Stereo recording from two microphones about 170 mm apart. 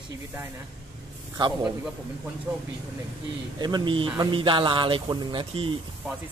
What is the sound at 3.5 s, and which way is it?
A man's voice, 25° right (ahead or behind).